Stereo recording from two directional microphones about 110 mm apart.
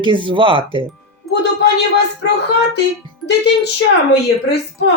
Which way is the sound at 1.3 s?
Centre (ahead or behind).